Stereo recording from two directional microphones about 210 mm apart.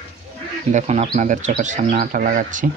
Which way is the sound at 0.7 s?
30° right (ahead or behind).